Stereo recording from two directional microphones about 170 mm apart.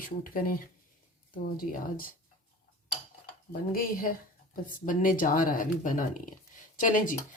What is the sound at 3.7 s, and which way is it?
Speech, 55° left (ahead or behind).